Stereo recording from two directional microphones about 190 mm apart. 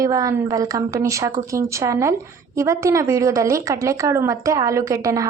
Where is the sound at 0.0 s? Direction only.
20° right (ahead or behind).